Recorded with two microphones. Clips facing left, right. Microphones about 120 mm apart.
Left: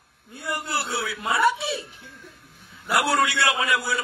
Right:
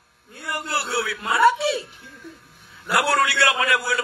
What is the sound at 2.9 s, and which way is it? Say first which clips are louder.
Speech: right 1 dB; 15° left (ahead or behind).